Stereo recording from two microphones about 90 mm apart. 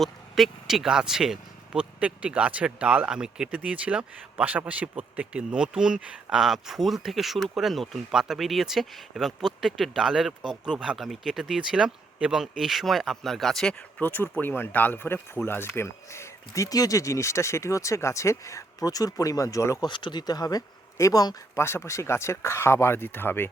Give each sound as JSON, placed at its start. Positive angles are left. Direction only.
{"t": 0.0, "sound": "speech", "side_deg": 0}
{"t": 13.7, "sound": "speech", "side_deg": 20}
{"t": 19.8, "sound": "speech", "side_deg": 60}
{"t": 21.6, "sound": "speech", "side_deg": 30}